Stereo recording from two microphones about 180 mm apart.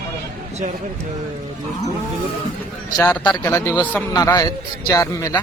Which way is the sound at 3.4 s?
15° left (ahead or behind).